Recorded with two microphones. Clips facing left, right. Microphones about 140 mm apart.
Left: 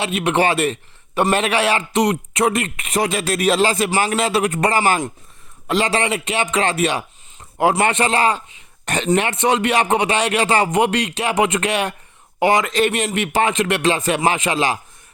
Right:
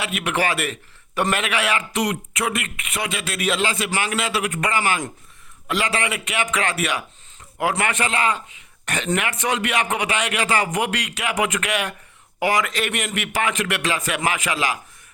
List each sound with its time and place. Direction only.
0.0 s a man's voice: 25° left (ahead or behind)